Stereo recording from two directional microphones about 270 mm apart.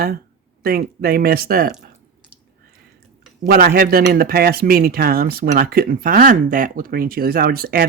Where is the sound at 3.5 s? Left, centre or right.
Right.